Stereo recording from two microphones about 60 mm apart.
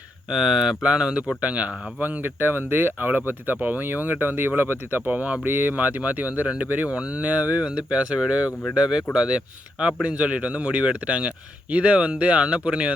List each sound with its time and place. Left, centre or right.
0.3 s speech: centre; by 5.0 s right
5.0 s speech: right